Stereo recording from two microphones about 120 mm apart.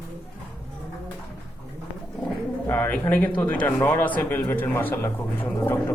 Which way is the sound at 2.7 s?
15° left (ahead or behind).